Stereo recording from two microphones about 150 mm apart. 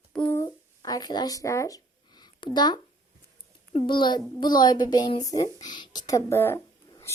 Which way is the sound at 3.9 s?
30° left (ahead or behind).